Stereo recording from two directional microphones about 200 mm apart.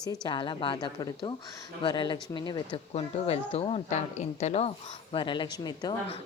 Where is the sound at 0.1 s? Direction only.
20° left (ahead or behind).